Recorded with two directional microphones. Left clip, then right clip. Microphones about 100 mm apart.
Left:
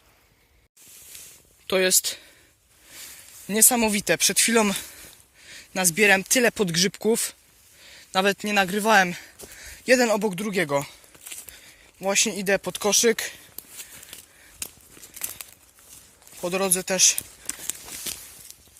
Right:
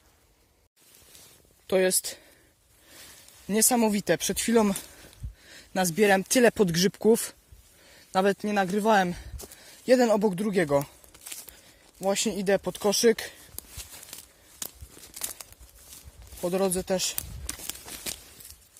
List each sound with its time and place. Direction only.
1.6 s speech: 20° right (ahead or behind)
3.4 s speech: 35° right (ahead or behind)
4.4 s speech: 25° right (ahead or behind)
5.5 s speech: 60° right (ahead or behind); by 6.2 s 45° right (ahead or behind)
6.2 s speech: 60° right (ahead or behind)
8.1 s speech: 30° right (ahead or behind)
8.9 s speech: 45° right (ahead or behind)
9.6 s a sound: 25° right (ahead or behind)
10.1 s speech: 85° right
12.0 s speech: 45° right (ahead or behind)
12.9 s speech: 55° right (ahead or behind)
16.7 s speech: 50° right (ahead or behind)
17.5 s walk: 30° right (ahead or behind)